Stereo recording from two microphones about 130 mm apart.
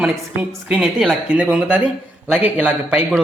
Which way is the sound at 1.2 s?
10° right (ahead or behind).